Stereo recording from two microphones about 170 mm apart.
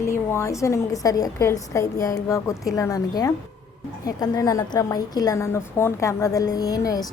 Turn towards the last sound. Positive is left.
turn(degrees=20)  # may be behind; listen again after turning